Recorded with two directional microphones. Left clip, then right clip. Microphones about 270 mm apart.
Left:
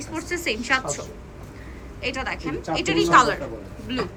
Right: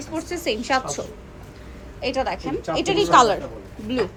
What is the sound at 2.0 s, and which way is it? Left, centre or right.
A woman's voice, centre.